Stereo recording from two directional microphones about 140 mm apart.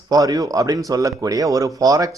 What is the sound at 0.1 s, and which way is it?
A man's voice, 25° right (ahead or behind).